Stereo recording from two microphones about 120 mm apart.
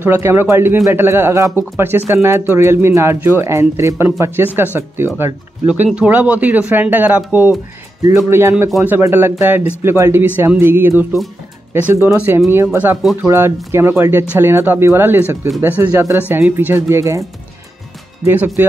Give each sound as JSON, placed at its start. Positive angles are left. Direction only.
{"t": 0.0, "sound": "speech", "side_deg": -20}
{"t": 13.0, "sound": "speech", "side_deg": 0}
{"t": 13.3, "sound": "speech", "side_deg": -20}